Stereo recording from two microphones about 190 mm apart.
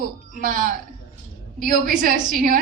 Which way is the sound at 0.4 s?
45° right (ahead or behind).